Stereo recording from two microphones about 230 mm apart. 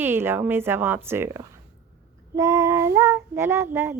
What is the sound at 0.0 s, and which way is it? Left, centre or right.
Child singing, centre.